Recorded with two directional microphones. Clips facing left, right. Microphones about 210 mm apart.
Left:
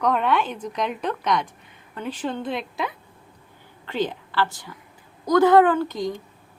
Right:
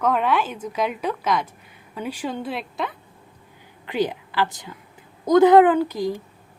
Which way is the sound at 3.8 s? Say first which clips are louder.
Right 2 dB; 15° right (ahead or behind).